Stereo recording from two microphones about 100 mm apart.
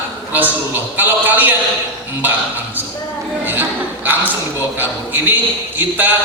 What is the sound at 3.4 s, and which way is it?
Chuckle, 20° right (ahead or behind).